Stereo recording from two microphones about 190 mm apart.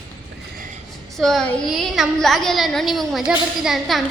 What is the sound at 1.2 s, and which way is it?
A woman's voice, centre (ahead or behind).